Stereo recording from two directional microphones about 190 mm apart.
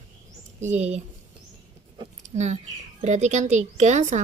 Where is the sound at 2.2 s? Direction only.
40° right (ahead or behind).